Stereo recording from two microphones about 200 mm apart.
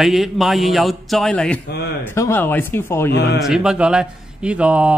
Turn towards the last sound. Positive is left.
turn(degrees=-5)  # may be behind; listen again after turning